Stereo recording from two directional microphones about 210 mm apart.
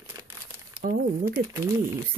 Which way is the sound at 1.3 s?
15° right (ahead or behind).